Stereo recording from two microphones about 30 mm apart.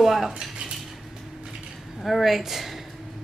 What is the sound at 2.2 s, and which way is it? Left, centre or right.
Speech, centre.